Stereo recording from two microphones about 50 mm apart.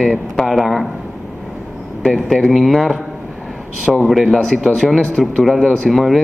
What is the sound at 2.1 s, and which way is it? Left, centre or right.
Speech, centre.